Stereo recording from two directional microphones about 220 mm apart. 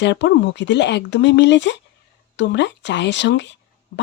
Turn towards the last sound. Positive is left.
turn(degrees=55)  # may be behind; listen again after turning